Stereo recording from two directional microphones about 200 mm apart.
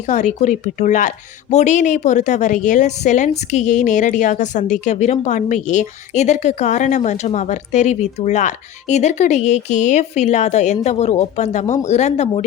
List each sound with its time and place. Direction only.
0.1 s speech: 35° left (ahead or behind)